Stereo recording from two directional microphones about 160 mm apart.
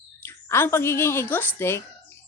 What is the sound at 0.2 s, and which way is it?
A woman's voice, 15° left (ahead or behind).